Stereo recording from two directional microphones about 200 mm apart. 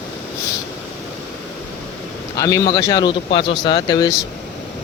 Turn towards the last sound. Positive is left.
turn(degrees=20)  # may be behind; listen again after turning